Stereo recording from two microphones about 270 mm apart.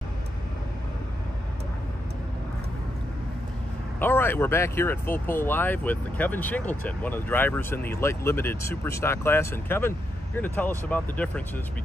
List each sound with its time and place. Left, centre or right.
4.0 s speech: centre